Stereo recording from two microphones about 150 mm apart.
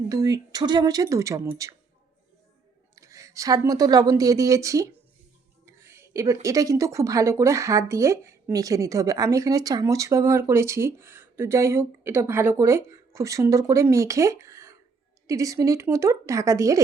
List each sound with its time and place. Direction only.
0.1 s speech: 25° right (ahead or behind)
2.9 s speech: 20° right (ahead or behind)